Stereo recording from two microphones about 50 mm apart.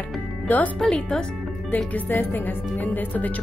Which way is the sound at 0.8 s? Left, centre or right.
Centre.